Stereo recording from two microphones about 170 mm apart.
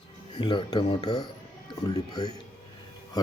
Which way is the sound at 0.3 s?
25° left (ahead or behind).